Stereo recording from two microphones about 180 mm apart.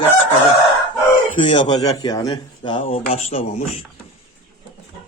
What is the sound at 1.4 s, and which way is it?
Speech, 25° left (ahead or behind).